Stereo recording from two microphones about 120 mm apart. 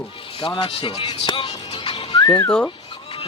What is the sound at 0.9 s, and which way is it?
Music, 40° left (ahead or behind).